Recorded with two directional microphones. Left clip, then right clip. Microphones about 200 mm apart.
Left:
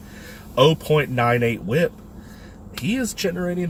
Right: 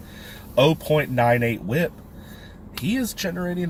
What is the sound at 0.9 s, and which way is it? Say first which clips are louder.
Speech: even; 20° right (ahead or behind).